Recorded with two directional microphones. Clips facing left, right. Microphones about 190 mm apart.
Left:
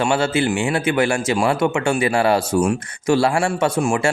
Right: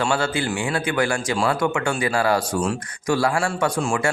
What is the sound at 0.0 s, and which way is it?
Speech, 25° left (ahead or behind).